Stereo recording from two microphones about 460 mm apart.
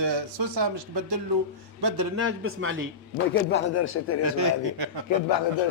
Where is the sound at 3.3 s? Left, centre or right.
Left.